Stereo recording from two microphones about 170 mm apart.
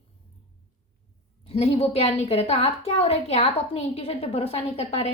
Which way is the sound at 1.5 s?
35° left (ahead or behind).